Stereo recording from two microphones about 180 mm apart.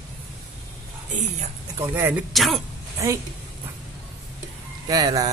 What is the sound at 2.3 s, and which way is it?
Speech, centre (ahead or behind).